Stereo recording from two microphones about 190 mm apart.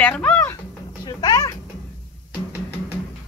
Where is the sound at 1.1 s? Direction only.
20° left (ahead or behind).